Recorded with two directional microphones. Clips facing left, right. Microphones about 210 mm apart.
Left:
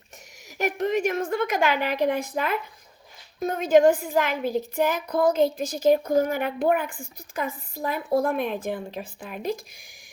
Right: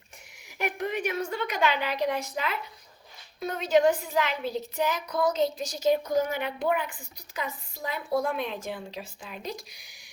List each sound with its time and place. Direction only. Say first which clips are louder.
0.6 s a woman's voice: left 6 dB; 40° left (ahead or behind)